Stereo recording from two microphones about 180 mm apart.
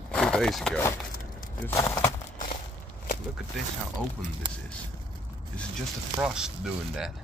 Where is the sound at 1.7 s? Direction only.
15° left (ahead or behind).